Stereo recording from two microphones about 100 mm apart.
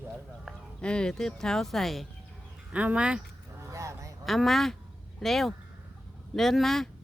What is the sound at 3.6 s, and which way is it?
Honk, 30° right (ahead or behind).